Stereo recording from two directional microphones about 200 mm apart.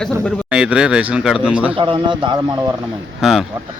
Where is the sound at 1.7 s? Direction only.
25° right (ahead or behind).